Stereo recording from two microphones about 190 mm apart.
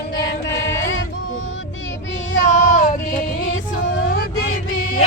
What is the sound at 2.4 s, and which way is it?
Female singing, 40° left (ahead or behind).